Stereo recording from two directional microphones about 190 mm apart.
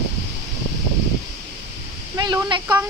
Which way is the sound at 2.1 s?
20° right (ahead or behind).